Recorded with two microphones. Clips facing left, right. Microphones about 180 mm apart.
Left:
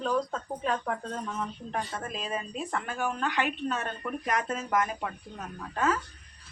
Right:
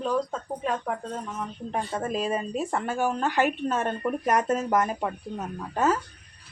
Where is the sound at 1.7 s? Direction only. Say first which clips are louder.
Right 7 dB; 25° right (ahead or behind).